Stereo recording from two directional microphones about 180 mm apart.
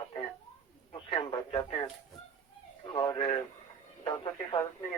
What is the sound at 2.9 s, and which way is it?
Speech, 25° left (ahead or behind).